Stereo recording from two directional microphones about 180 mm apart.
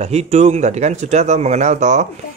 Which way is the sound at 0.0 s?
35° right (ahead or behind).